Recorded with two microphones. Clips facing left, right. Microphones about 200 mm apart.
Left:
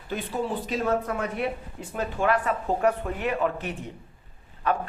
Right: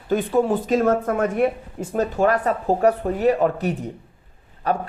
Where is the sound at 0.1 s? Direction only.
50° right (ahead or behind).